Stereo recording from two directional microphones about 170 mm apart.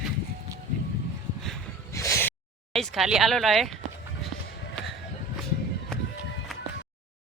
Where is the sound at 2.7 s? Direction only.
Centre (ahead or behind).